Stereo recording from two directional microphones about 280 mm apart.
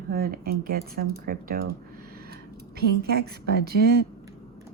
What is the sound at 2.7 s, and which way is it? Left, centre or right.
Speech, right.